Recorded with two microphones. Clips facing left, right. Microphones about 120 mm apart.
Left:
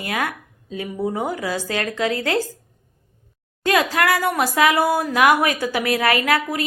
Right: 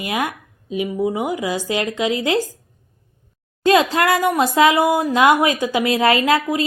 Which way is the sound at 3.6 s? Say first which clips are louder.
Right 4 dB; 25° right (ahead or behind).